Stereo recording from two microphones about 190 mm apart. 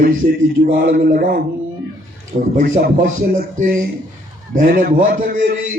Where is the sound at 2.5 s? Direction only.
45° right (ahead or behind).